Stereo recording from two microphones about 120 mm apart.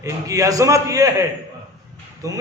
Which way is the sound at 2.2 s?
30° right (ahead or behind).